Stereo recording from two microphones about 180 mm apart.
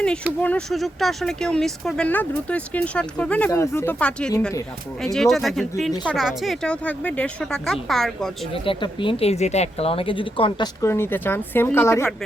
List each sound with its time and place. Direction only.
0.4 s speech: 5° left (ahead or behind)
8.6 s speech: 30° left (ahead or behind)
10.8 s speech: 15° left (ahead or behind)